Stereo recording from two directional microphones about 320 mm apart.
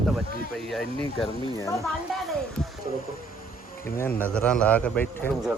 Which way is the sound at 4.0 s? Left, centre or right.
Centre.